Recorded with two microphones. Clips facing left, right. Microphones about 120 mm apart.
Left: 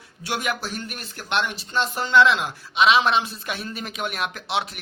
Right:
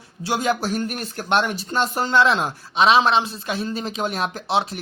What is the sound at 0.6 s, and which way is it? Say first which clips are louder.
Speech: right 8 dB; 40° right (ahead or behind).